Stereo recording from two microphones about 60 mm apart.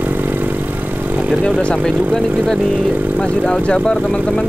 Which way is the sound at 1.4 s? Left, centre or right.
Centre.